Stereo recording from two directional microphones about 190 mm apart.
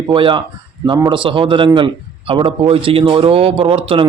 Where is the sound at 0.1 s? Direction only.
25° right (ahead or behind).